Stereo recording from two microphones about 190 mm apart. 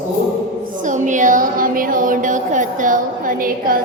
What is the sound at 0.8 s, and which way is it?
Speech, 40° right (ahead or behind).